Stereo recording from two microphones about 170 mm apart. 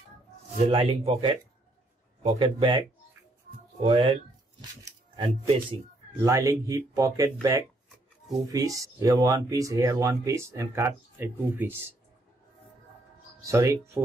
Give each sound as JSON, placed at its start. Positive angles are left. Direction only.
{"t": 0.6, "sound": "speech", "side_deg": -35}
{"t": 3.8, "sound": "speech", "side_deg": -30}
{"t": 5.1, "sound": "speech", "side_deg": -30}
{"t": 6.2, "sound": "speech", "side_deg": -20}
{"t": 8.5, "sound": "speech", "side_deg": -20}
{"t": 13.5, "sound": "speech", "side_deg": -15}